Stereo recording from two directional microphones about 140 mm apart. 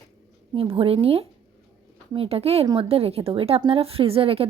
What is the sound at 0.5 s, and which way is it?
A woman's voice, 40° right (ahead or behind).